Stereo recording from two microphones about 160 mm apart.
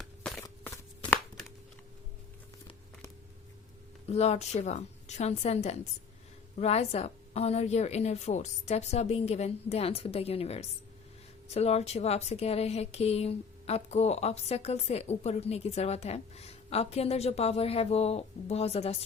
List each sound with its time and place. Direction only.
0.0 s walk: 5° left (ahead or behind)
4.0 s a woman's voice: 40° left (ahead or behind)